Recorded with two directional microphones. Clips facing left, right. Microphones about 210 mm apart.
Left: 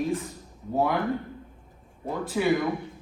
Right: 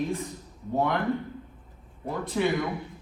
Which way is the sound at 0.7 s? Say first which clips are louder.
Left 1 dB; 5° left (ahead or behind).